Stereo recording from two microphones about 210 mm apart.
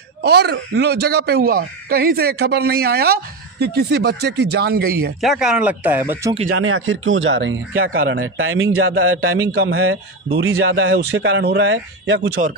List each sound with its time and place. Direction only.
0.2 s speech: 50° right (ahead or behind)
5.2 s speech: centre (ahead or behind)
6.5 s speech: 75° right (ahead or behind); by 7.9 s 55° right (ahead or behind)
7.9 s a man's voice: 70° right (ahead or behind); by 9.5 s 90° right
9.6 s a man's voice: 60° right (ahead or behind)